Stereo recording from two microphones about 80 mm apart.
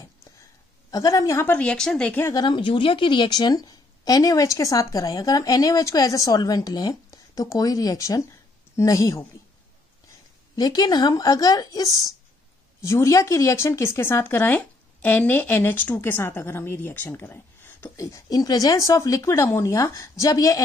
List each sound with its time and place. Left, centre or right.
0.9 s a woman's voice: left
1.6 s speech: centre
2.3 s a woman's voice: left
10.5 s a woman's voice: left
17.9 s a woman's voice: left